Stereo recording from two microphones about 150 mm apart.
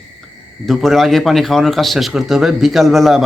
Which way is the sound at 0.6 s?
Centre (ahead or behind).